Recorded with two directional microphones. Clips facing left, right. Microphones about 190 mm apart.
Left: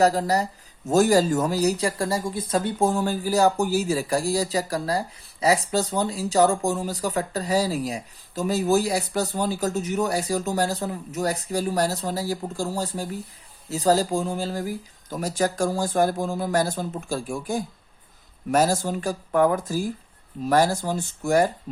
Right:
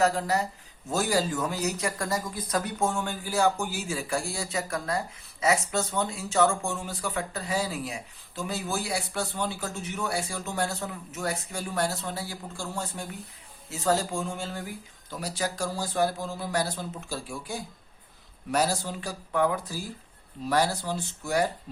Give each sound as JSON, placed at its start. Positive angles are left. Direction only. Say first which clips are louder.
{"t": 0.0, "sound": "speech", "louder": "left 5 dB", "side_deg": 35}